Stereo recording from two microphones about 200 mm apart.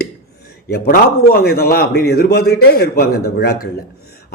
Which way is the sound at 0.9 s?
50° left (ahead or behind).